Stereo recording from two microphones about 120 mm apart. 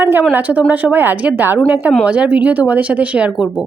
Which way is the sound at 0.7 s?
15° right (ahead or behind).